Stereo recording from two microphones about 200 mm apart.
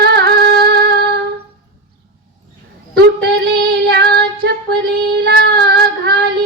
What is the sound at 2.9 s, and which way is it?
Female singing, 55° right (ahead or behind).